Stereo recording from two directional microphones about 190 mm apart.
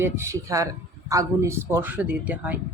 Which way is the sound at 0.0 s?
15° right (ahead or behind).